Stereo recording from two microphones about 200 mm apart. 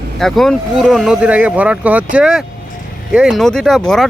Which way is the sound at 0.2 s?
Centre (ahead or behind).